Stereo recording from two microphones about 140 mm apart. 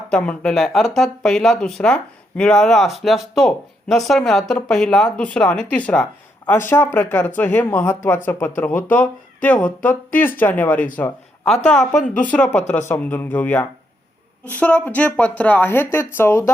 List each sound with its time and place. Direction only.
0.1 s speech: 5° left (ahead or behind)